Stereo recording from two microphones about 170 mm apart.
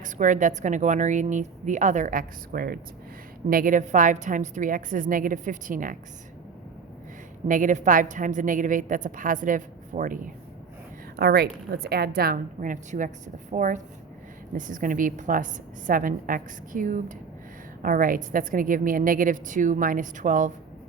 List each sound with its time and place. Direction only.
0.0 s a woman's voice: 50° right (ahead or behind)
7.4 s a woman's voice: 50° right (ahead or behind)
11.2 s a woman's voice: 65° right (ahead or behind); by 20.5 s 50° right (ahead or behind)